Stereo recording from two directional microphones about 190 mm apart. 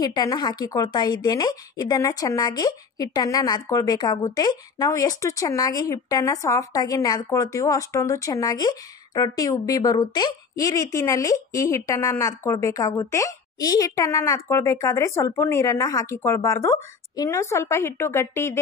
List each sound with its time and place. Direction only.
0.0 s speech: 20° left (ahead or behind)